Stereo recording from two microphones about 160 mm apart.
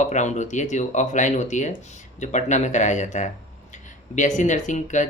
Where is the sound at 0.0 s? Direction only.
45° left (ahead or behind).